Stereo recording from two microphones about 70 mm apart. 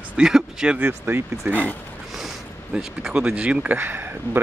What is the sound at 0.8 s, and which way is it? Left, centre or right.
Speech, right.